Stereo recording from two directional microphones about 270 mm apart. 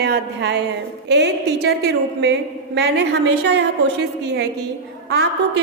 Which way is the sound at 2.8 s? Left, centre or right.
Right.